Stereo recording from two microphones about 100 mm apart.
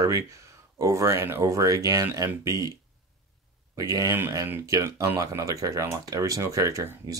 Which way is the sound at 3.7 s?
35° right (ahead or behind).